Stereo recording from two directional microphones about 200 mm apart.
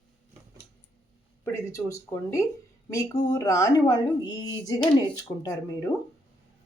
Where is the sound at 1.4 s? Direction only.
15° left (ahead or behind).